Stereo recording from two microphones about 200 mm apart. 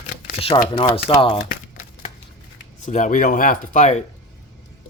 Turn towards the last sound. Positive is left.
turn(degrees=40)  # may be behind; listen again after turning